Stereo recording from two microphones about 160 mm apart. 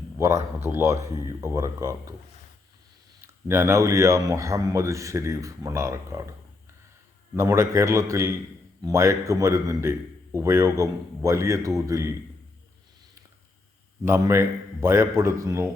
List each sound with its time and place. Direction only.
0.2 s a man's voice: 20° right (ahead or behind)
3.2 s a man's voice: 15° right (ahead or behind)
7.3 s a man's voice: 15° right (ahead or behind)
14.0 s a man's voice: 15° right (ahead or behind)